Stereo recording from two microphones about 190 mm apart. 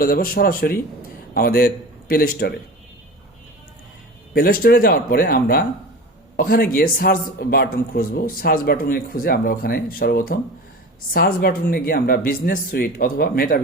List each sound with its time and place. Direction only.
0.0 s a man's voice: 50° left (ahead or behind)
4.4 s speech: 50° left (ahead or behind)